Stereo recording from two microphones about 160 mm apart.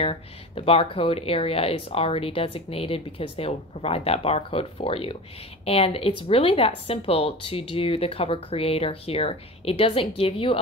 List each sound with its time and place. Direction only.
0.0 s speech: 35° left (ahead or behind)